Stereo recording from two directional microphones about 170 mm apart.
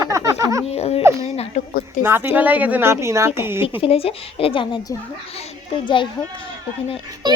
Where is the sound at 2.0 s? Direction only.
15° right (ahead or behind).